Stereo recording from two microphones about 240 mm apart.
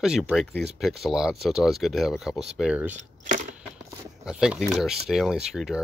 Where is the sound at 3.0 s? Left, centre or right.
Right.